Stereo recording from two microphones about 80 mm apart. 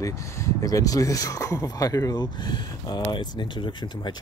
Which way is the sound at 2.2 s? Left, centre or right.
Left.